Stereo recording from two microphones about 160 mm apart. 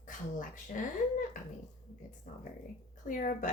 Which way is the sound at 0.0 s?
55° left (ahead or behind).